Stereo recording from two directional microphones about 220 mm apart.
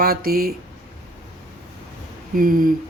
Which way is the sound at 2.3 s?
40° right (ahead or behind).